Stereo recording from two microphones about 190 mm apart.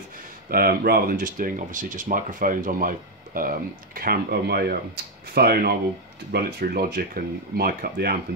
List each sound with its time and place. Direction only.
0.5 s speech: 50° right (ahead or behind)